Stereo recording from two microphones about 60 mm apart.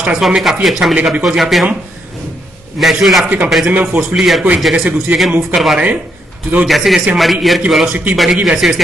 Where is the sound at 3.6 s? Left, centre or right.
Right.